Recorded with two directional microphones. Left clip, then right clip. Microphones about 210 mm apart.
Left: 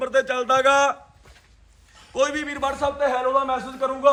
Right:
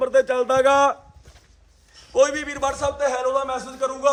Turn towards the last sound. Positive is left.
turn(degrees=-15)  # may be behind; listen again after turning